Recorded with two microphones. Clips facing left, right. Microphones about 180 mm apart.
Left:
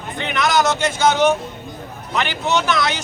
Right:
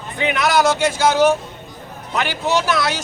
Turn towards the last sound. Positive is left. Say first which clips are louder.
# even
turn(degrees=-5)  # may be behind; listen again after turning